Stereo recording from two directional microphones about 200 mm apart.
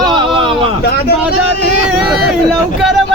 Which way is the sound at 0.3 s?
25° right (ahead or behind).